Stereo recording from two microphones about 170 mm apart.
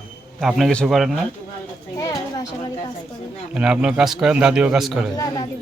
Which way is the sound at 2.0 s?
20° left (ahead or behind).